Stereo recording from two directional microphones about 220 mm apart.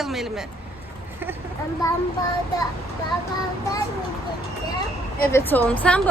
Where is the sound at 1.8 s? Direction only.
15° left (ahead or behind).